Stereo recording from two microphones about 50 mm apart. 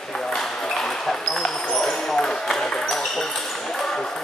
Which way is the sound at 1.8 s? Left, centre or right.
Centre.